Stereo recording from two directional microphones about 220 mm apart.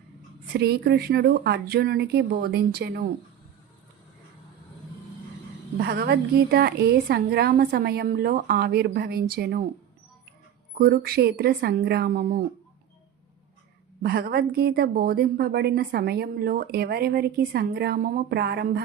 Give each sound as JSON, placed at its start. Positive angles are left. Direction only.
{"t": 0.5, "sound": "a woman's voice", "side_deg": -45}
{"t": 5.7, "sound": "a woman's voice", "side_deg": -45}
{"t": 10.8, "sound": "a woman's voice", "side_deg": -45}
{"t": 14.0, "sound": "a woman's voice", "side_deg": -45}